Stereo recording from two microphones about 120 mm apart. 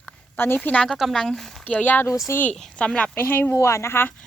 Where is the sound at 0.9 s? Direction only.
Centre (ahead or behind).